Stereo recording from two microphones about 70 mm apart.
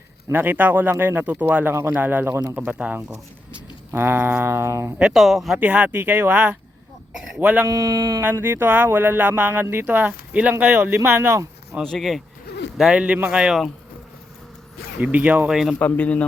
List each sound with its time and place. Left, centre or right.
0.3 s speech: right
2.3 s speech: right
2.6 s speech: right
3.9 s a sound: right
5.1 s speech: centre
5.5 s speech: right
7.7 s speech: right
8.2 s speech: right
10.6 s a sound: right
11.8 s a man's voice: centre
15.0 s speech: right
15.4 s speech: centre
15.8 s speech: left